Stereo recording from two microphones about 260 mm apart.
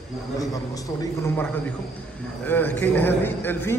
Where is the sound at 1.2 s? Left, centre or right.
Centre.